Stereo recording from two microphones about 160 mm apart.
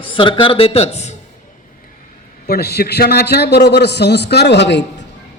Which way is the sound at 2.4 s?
80° left.